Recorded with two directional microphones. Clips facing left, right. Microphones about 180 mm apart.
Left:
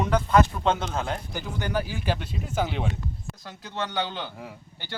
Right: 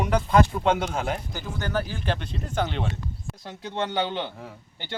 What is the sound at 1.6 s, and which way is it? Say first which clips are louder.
Speech: even; 10° left (ahead or behind).